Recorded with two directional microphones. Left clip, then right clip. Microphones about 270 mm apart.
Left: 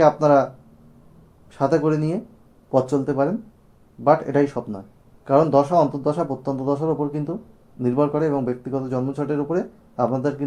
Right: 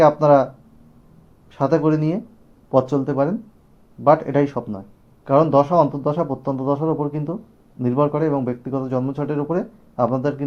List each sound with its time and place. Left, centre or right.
0.0 s speech: centre
1.5 s speech: centre